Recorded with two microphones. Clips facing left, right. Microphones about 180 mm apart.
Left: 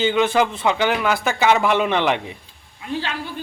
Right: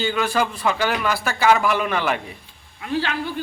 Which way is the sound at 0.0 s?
20° left (ahead or behind).